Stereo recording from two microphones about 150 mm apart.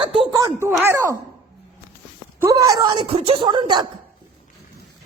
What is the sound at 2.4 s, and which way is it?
A woman's voice, 20° right (ahead or behind).